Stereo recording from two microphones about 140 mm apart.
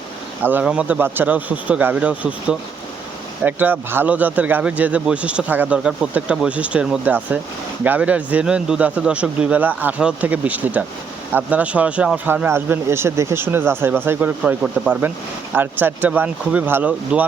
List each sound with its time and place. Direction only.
0.4 s speech: 10° right (ahead or behind)